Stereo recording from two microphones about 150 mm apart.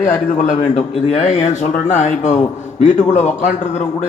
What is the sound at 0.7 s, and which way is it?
Speech, 40° left (ahead or behind).